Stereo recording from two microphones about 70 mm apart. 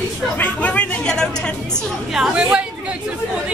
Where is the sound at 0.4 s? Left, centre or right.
Centre.